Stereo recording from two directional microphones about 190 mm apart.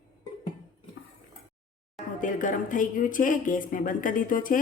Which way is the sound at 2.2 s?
45° left (ahead or behind).